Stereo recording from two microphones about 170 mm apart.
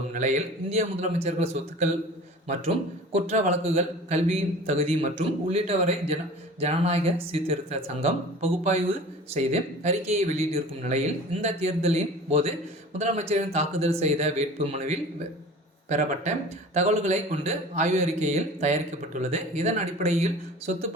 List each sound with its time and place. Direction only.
0.1 s a man's voice: 45° right (ahead or behind)